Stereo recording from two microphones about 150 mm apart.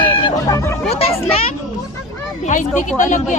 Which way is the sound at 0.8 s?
45° left (ahead or behind).